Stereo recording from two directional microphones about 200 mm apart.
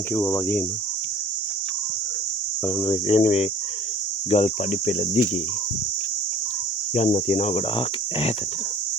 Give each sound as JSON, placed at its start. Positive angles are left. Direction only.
{"t": 0.1, "sound": "cricket", "side_deg": 10}
{"t": 2.6, "sound": "speech", "side_deg": 20}
{"t": 3.2, "sound": "speech", "side_deg": 35}
{"t": 6.9, "sound": "speech", "side_deg": 35}